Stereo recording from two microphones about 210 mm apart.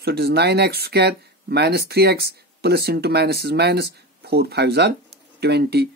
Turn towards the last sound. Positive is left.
turn(degrees=-50)  # may be behind; listen again after turning